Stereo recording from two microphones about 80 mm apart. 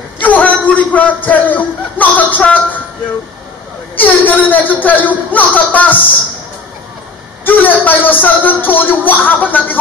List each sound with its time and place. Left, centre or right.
0.2 s a sound: centre
3.9 s a man's voice: left
7.4 s a man's voice: left